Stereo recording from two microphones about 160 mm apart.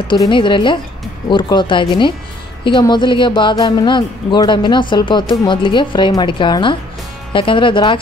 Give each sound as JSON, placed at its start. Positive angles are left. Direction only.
{"t": 0.1, "sound": "speech", "side_deg": 30}